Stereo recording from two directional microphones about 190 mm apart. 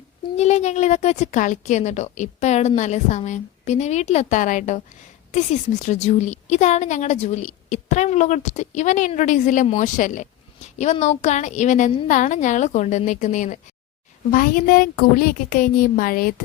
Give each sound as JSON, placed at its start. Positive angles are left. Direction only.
{"t": 0.3, "sound": "a woman's voice", "side_deg": 35}